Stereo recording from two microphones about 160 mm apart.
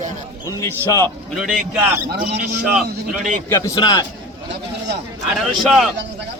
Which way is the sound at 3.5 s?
20° left (ahead or behind).